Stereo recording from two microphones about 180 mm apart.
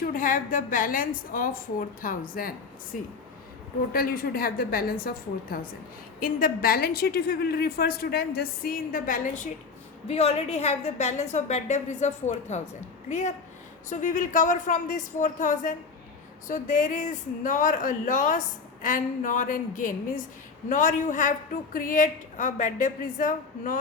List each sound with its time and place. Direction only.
0.0 s speech: 50° left (ahead or behind)
3.9 s a woman's voice: 55° left (ahead or behind)
10.1 s a woman's voice: 35° left (ahead or behind)